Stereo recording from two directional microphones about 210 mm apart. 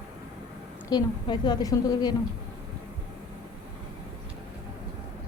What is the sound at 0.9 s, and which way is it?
A woman's voice, 20° left (ahead or behind).